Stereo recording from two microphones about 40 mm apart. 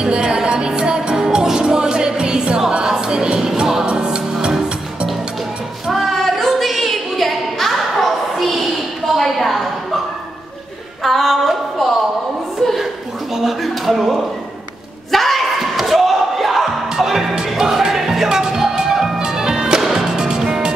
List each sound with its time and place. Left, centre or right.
0.0 s music: centre
3.8 s music: right
5.9 s a sound: centre
11.0 s music: centre
13.3 s a sound: centre
15.0 s slam: centre
16.9 s music: centre